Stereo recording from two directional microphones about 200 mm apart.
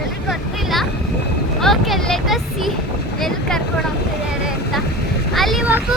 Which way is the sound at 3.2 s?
Centre (ahead or behind).